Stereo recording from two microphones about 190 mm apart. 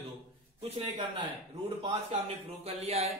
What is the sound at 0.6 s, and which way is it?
A man's voice, 30° right (ahead or behind).